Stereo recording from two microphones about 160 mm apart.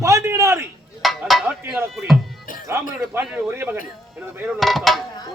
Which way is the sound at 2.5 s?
55° left (ahead or behind).